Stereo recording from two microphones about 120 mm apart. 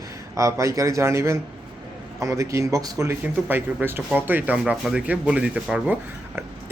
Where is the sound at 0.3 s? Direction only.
25° right (ahead or behind).